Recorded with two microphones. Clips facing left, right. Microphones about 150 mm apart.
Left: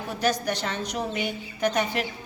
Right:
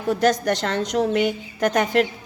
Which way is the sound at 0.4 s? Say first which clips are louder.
Right 7 dB; 90° right.